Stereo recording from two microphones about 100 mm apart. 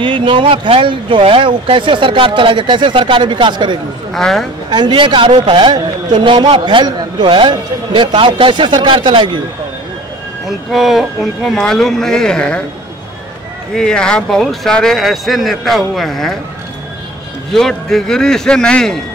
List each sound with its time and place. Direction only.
0.0 s speech: 55° right (ahead or behind)
4.1 s speech: 5° left (ahead or behind)
4.6 s speech: 45° right (ahead or behind)
10.7 s speech: centre (ahead or behind)
13.7 s speech: 5° left (ahead or behind)
17.5 s speech: 5° left (ahead or behind)